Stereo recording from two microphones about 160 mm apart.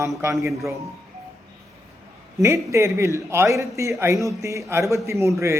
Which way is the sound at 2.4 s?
20° right (ahead or behind).